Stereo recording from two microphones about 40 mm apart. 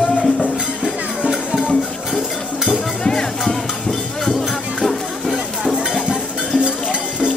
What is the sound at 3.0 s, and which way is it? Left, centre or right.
Music, centre.